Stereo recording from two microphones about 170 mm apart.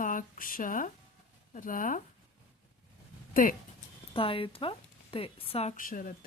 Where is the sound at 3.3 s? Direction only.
55° left (ahead or behind).